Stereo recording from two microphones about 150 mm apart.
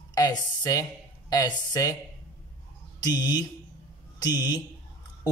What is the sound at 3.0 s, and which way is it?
Speech, 30° left (ahead or behind).